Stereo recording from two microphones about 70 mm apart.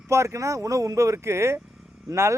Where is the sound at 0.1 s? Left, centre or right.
Right.